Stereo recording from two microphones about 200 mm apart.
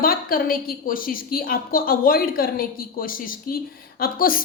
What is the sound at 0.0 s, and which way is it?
A woman's voice, 45° left (ahead or behind).